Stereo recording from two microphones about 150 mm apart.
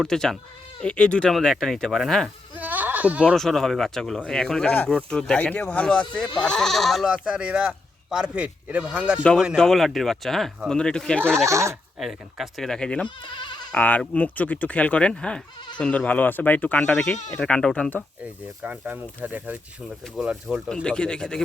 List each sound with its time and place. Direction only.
0.0 s speech: 5° left (ahead or behind)
2.6 s bleat: 10° right (ahead or behind)
3.3 s speech: centre (ahead or behind)
11.2 s speech: 15° right (ahead or behind)
11.9 s speech: centre (ahead or behind)
18.2 s speech: 10° right (ahead or behind)